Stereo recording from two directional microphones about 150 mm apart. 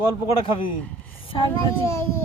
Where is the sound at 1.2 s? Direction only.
35° left (ahead or behind).